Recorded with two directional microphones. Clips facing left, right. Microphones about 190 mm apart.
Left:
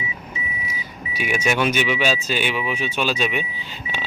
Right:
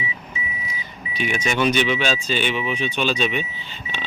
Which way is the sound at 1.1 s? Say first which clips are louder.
Left 1 dB; 10° left (ahead or behind).